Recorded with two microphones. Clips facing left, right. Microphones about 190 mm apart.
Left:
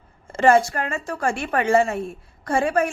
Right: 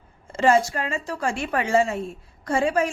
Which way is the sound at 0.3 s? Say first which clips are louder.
Left 2 dB; 55° left (ahead or behind).